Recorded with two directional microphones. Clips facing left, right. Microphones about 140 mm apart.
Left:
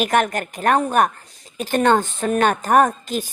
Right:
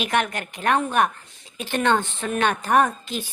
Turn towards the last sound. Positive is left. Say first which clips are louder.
# left 4 dB
turn(degrees=45)  # may be behind; listen again after turning